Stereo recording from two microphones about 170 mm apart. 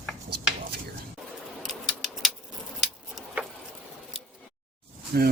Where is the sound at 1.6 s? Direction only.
Centre (ahead or behind).